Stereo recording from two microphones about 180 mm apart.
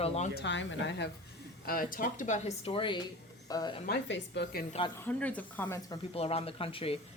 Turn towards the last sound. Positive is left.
turn(degrees=30)  # may be behind; listen again after turning